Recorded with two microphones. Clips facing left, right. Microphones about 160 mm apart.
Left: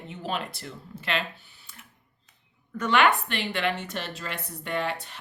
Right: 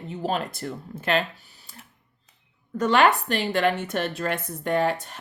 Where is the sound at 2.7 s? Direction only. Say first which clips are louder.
Right 3 dB; 40° right (ahead or behind).